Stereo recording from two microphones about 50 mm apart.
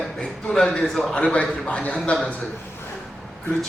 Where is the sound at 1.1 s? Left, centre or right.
Left.